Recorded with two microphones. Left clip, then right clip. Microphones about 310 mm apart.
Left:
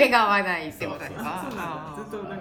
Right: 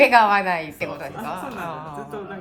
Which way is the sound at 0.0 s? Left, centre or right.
Right.